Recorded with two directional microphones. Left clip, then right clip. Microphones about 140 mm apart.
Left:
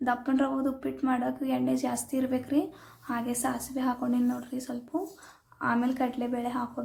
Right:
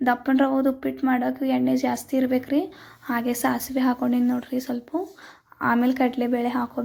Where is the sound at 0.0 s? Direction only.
35° right (ahead or behind).